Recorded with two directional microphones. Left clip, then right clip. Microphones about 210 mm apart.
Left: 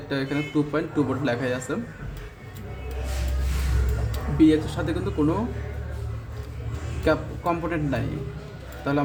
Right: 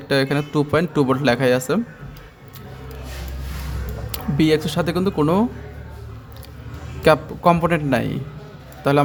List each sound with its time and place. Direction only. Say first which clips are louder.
0.1 s a man's voice: right 7 dB; 40° right (ahead or behind)
4.1 s speech: right 1 dB; 45° right (ahead or behind)
7.0 s a man's voice: right 9 dB; 40° right (ahead or behind)